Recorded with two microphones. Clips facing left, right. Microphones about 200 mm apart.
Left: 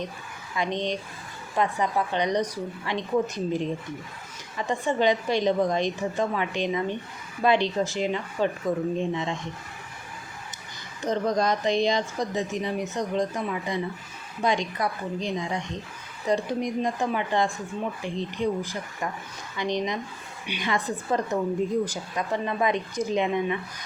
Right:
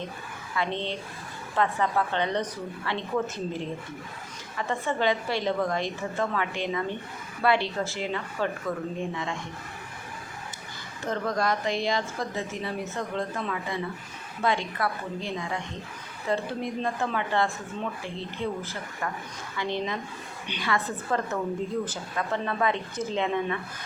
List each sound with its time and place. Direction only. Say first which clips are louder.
0.5 s speech: left 2 dB; 15° left (ahead or behind)
11.0 s speech: left 3 dB; 20° left (ahead or behind)